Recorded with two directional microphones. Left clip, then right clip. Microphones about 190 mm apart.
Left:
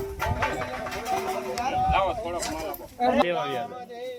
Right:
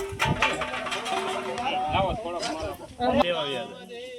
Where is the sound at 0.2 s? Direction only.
20° right (ahead or behind).